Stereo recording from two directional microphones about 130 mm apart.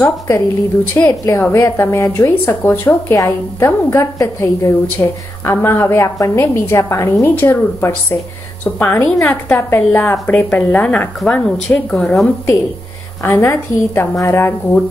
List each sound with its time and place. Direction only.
1.0 s a woman's voice: 25° left (ahead or behind); by 12.3 s 5° left (ahead or behind)
13.2 s a woman's voice: 20° left (ahead or behind)